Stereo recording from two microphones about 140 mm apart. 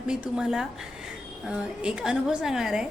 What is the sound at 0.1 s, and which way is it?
A woman's voice, 5° right (ahead or behind).